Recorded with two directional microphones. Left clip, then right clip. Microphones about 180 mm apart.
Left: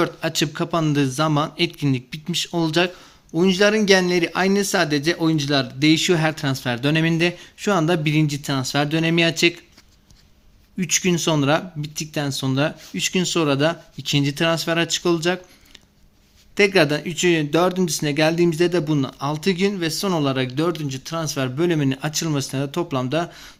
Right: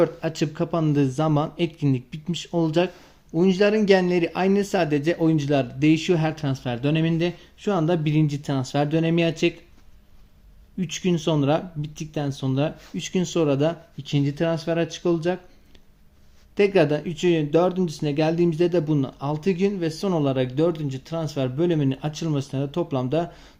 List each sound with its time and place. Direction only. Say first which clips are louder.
0.0 s speech: left 1 dB; centre (ahead or behind)
10.8 s speech: left 5 dB; 5° left (ahead or behind)
16.6 s speech: left 2 dB; 5° left (ahead or behind)